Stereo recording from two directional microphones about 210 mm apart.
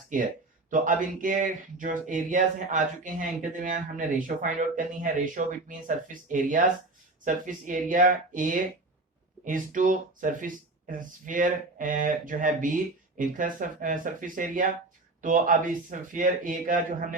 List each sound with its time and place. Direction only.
0.7 s speech: 40° right (ahead or behind)